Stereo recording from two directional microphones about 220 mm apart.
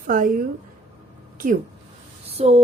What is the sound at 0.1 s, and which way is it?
Speech, 40° right (ahead or behind).